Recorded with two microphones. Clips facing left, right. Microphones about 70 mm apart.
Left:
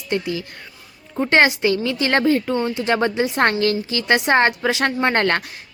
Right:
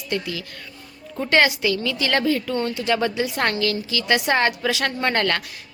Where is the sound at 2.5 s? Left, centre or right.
Centre.